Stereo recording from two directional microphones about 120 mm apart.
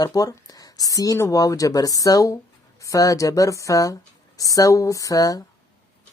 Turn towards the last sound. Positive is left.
turn(degrees=30)  # may be behind; listen again after turning